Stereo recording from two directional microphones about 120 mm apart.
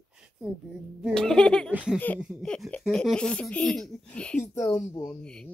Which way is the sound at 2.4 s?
5° left (ahead or behind).